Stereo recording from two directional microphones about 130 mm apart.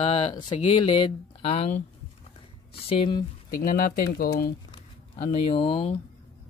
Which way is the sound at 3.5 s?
90° left.